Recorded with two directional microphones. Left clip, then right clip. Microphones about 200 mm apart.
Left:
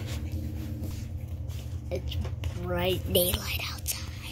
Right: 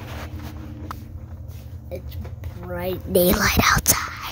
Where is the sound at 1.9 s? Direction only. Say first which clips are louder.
Right 1 dB; 5° left (ahead or behind).